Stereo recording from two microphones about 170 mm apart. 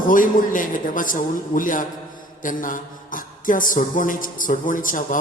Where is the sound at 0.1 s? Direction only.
50° left (ahead or behind).